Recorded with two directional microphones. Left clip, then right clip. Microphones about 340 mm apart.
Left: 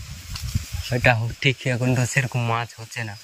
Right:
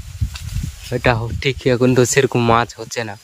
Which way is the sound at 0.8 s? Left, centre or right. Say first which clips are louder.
Right 2 dB; centre.